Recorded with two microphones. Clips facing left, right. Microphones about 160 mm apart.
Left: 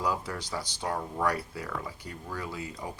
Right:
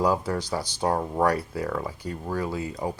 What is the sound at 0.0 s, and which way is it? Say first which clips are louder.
Speech: right 8 dB; 40° right (ahead or behind).